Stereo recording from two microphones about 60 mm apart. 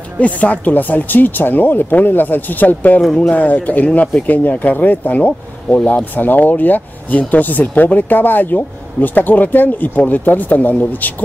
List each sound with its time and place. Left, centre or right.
0.2 s speech: left